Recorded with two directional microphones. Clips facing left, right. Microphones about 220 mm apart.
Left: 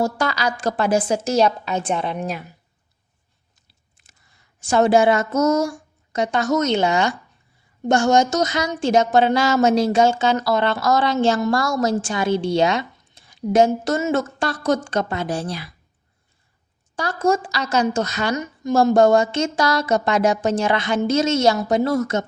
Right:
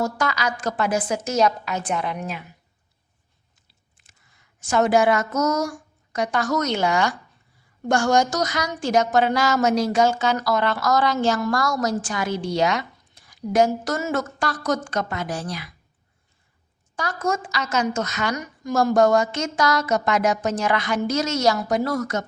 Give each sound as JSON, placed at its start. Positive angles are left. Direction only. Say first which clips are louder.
{"t": 0.0, "sound": "a woman's voice", "louder": "left 3 dB", "side_deg": 30}
{"t": 4.6, "sound": "speech", "louder": "left 3 dB", "side_deg": 30}
{"t": 16.9, "sound": "speech", "louder": "left 5 dB", "side_deg": 30}